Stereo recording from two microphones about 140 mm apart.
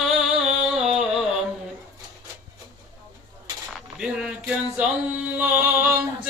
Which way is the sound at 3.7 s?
5° right (ahead or behind).